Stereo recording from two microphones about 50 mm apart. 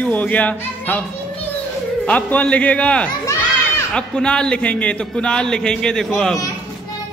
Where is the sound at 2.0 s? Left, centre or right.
Left; by 6.3 s centre.